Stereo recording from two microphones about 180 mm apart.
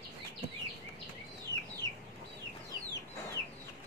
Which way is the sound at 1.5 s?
70° right (ahead or behind).